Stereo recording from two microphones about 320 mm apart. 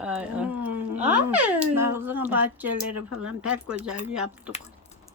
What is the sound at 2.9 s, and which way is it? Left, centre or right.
Speech, right.